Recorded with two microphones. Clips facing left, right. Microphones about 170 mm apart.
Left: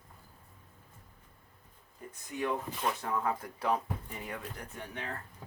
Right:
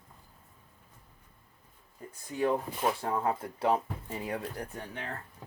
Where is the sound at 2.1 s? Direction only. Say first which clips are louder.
Right 5 dB; 30° right (ahead or behind).